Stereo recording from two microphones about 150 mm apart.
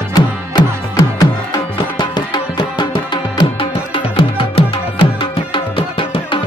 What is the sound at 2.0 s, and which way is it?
Music, 30° left (ahead or behind).